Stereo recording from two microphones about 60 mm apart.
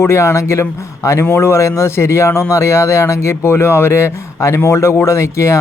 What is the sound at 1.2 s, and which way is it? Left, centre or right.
Speech, left.